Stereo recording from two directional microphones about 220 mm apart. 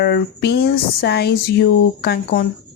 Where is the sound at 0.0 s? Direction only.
45° left (ahead or behind).